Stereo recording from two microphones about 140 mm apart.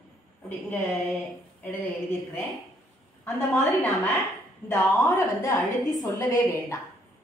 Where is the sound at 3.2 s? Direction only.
15° left (ahead or behind).